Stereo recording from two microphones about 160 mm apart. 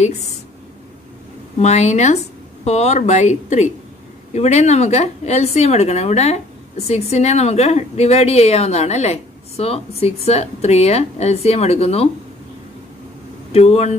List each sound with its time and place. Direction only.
1.6 s a woman's voice: 45° left (ahead or behind)
13.5 s a woman's voice: 40° left (ahead or behind)